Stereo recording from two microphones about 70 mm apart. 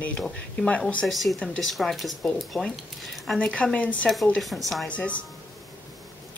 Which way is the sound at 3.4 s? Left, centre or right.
Centre.